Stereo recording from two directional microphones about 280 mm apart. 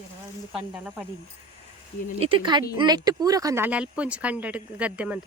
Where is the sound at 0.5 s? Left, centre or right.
Centre.